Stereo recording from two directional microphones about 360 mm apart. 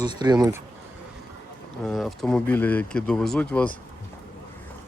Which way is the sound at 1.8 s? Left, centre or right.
Centre.